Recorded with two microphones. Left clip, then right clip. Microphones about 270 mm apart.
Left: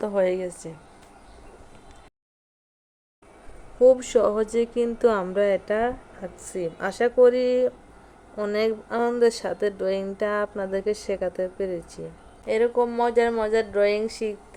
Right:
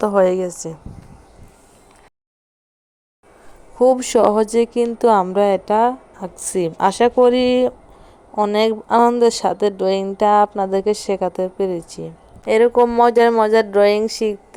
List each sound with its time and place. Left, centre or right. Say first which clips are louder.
0.0 s speech: right 8 dB; right
3.8 s speech: right 4 dB; right